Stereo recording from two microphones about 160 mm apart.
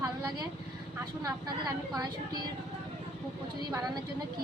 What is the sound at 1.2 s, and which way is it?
A woman's voice, 25° right (ahead or behind).